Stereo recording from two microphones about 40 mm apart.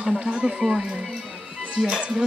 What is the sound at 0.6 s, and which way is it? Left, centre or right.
Speech, centre.